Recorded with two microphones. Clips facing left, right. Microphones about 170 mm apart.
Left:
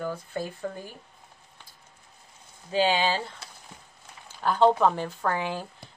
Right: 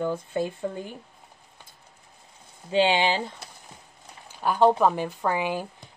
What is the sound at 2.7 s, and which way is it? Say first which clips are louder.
Speech: right 2 dB; 20° right (ahead or behind).